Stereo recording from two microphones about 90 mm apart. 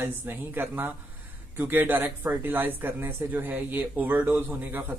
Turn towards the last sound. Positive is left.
turn(degrees=-20)  # may be behind; listen again after turning